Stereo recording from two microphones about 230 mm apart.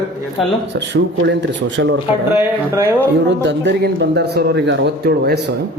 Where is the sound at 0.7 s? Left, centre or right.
Right.